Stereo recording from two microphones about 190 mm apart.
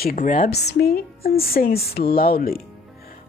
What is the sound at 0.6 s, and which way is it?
Speech, 60° left (ahead or behind).